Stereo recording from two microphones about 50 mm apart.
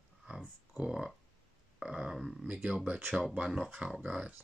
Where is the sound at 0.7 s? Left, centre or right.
Centre.